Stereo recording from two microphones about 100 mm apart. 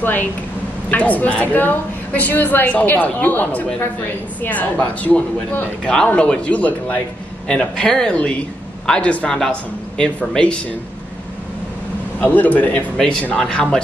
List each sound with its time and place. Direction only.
0.0 s a woman's voice: 20° left (ahead or behind)
12.2 s a woman's voice: 15° left (ahead or behind)